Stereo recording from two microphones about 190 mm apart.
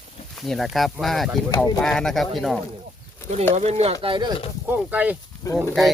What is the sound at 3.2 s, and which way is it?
Bird, 15° left (ahead or behind).